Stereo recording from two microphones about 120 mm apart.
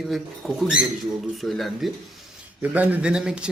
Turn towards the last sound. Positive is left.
turn(degrees=-5)  # may be behind; listen again after turning